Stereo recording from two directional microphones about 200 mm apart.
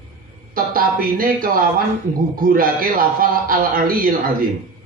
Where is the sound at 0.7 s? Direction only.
45° right (ahead or behind).